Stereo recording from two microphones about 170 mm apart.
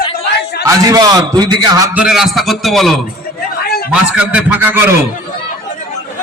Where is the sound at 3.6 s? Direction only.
65° left (ahead or behind).